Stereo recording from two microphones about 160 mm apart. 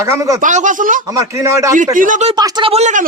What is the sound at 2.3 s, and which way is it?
Speech, 25° right (ahead or behind).